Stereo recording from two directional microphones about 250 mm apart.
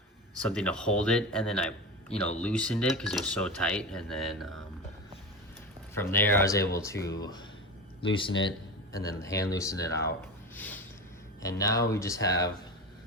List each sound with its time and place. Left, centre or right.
0.3 s speech: centre
6.0 s speech: centre
8.4 s speech: centre
10.5 s a sound: centre
11.4 s speech: centre